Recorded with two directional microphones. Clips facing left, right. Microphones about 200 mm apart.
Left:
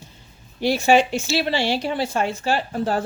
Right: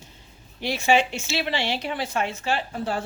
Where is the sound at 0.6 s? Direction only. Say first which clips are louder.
Left 5 dB; 35° left (ahead or behind).